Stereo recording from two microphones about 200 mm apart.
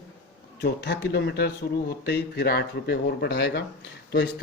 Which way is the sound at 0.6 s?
55° left (ahead or behind).